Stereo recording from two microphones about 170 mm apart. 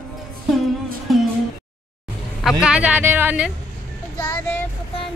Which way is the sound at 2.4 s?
5° right (ahead or behind).